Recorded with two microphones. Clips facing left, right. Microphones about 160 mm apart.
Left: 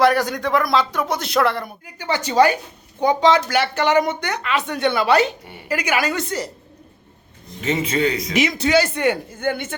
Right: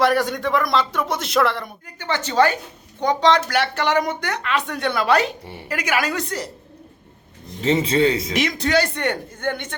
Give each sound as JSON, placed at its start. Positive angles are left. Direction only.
{"t": 0.0, "sound": "speech", "side_deg": 0}
{"t": 2.0, "sound": "speech", "side_deg": 10}
{"t": 7.6, "sound": "a man's voice", "side_deg": -30}
{"t": 8.3, "sound": "speech", "side_deg": 5}